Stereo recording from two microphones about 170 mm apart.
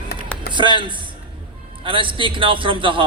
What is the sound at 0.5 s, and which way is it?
A man's voice, 30° right (ahead or behind).